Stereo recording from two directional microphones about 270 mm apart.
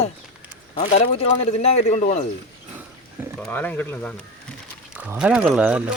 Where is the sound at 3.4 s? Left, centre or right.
Centre.